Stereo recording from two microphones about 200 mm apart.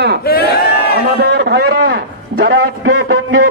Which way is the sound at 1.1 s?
55° right (ahead or behind).